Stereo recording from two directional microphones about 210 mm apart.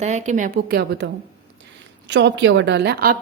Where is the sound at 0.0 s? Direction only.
35° right (ahead or behind).